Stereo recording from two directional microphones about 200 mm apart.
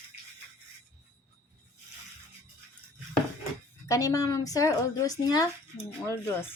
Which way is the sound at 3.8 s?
15° left (ahead or behind).